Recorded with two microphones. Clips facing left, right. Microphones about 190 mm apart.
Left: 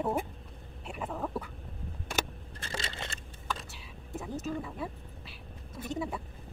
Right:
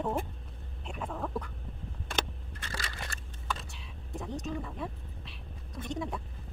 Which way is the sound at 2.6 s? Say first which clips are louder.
Left 2 dB; 25° left (ahead or behind).